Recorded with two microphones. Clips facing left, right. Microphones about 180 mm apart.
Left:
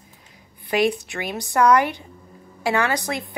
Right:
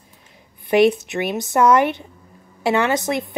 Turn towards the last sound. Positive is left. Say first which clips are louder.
# right 5 dB
turn(degrees=-20)  # may be behind; listen again after turning